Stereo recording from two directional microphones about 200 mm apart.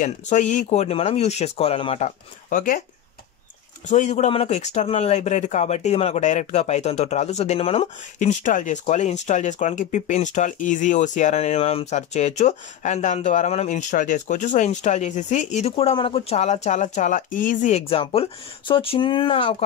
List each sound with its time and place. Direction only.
0.0 s speech: 35° left (ahead or behind)
3.9 s speech: 35° left (ahead or behind)